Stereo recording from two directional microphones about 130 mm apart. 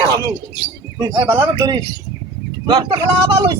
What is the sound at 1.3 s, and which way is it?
A man's voice, 30° right (ahead or behind).